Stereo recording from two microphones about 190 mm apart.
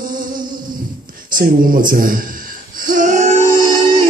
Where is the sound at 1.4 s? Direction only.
45° right (ahead or behind).